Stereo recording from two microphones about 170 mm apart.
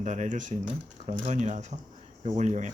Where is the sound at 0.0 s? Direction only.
45° right (ahead or behind).